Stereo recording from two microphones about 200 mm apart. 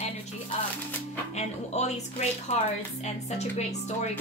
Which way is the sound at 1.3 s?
35° left (ahead or behind).